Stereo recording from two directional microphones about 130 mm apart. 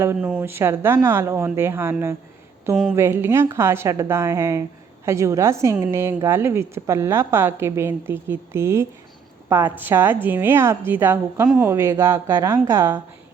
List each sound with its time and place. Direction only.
0.0 s a woman's voice: 15° right (ahead or behind)